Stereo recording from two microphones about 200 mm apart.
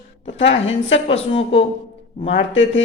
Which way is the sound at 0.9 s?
30° left (ahead or behind).